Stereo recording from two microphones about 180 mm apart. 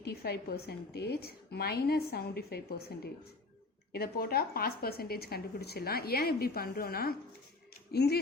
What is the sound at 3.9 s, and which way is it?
A woman's voice, 60° left (ahead or behind).